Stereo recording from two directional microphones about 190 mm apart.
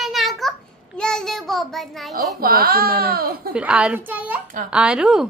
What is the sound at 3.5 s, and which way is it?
A child's voice, 5° right (ahead or behind).